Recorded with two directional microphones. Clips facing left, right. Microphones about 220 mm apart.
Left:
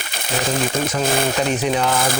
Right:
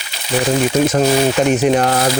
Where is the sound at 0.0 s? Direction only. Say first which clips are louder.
Left 3 dB; 50° left (ahead or behind).